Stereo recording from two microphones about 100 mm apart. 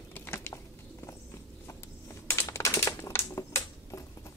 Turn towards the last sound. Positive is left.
turn(degrees=30)  # may be behind; listen again after turning